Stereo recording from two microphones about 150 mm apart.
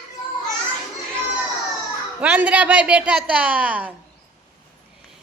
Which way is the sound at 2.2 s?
10° right (ahead or behind).